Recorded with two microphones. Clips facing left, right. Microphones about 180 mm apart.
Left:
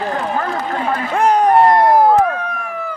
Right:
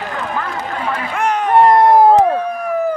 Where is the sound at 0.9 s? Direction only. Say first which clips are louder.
Left 4 dB; 35° left (ahead or behind).